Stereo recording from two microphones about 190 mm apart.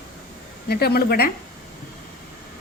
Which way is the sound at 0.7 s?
55° left (ahead or behind).